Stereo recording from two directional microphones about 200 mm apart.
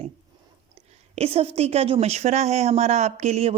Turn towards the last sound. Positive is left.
turn(degrees=-30)  # may be behind; listen again after turning